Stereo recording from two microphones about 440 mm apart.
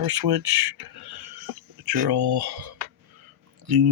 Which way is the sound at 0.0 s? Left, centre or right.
Right.